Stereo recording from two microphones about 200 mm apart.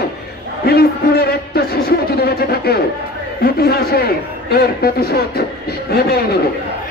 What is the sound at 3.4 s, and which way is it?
A man's voice, 50° left (ahead or behind).